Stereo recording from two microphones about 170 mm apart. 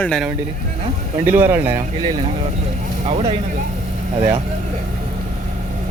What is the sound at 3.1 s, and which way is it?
Speech, 40° right (ahead or behind).